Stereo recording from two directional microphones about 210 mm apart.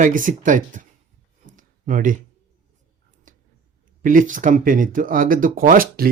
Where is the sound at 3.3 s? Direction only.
40° right (ahead or behind).